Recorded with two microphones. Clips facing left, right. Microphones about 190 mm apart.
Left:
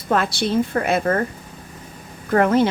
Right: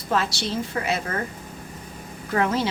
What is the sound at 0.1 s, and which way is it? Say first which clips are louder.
Speech: left 5 dB; 55° left (ahead or behind).